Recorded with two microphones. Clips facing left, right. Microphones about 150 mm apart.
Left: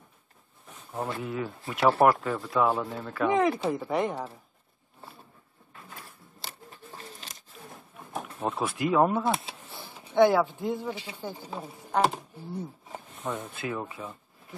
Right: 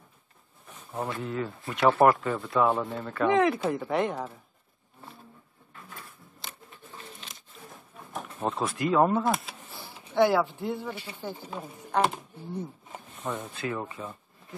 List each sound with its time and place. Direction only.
1.2 s speech: 5° left (ahead or behind)
7.0 s a sound: centre (ahead or behind)
8.1 s speech: 5° left (ahead or behind)
10.1 s speech: 20° left (ahead or behind)
11.5 s speech: 5° left (ahead or behind)
13.2 s speech: centre (ahead or behind)